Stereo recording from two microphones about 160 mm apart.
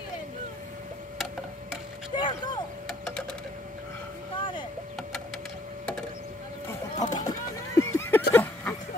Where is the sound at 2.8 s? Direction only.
5° left (ahead or behind).